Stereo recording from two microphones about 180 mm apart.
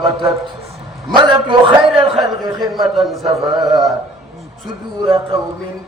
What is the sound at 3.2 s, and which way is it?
Speech, 20° right (ahead or behind).